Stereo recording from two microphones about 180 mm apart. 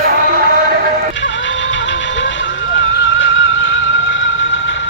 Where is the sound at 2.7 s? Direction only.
90° left.